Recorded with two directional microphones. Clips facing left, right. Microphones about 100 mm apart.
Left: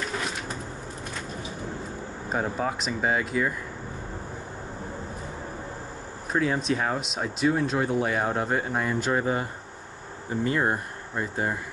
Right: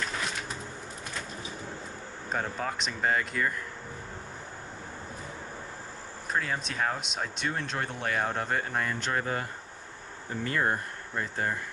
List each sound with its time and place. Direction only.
2.3 s speech: 10° left (ahead or behind)
6.3 s speech: 5° left (ahead or behind)